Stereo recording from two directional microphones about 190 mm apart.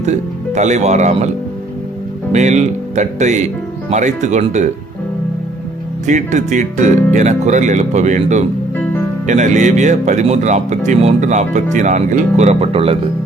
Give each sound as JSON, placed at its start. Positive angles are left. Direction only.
{"t": 0.0, "sound": "speech", "side_deg": -35}
{"t": 2.3, "sound": "speech", "side_deg": -40}
{"t": 6.1, "sound": "speech", "side_deg": -40}
{"t": 8.7, "sound": "music", "side_deg": 10}
{"t": 9.2, "sound": "speech", "side_deg": -40}